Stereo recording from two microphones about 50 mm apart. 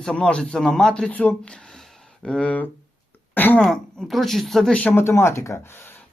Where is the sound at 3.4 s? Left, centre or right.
Left.